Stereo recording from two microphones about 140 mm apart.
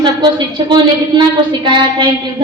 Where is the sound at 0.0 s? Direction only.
30° right (ahead or behind).